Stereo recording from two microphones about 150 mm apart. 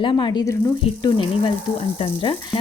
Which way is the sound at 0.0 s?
35° left (ahead or behind).